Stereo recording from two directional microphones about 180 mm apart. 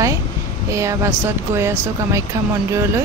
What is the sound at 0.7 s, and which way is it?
Speech, 15° right (ahead or behind).